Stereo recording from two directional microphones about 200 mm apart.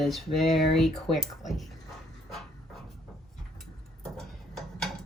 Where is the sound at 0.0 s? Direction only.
Centre (ahead or behind).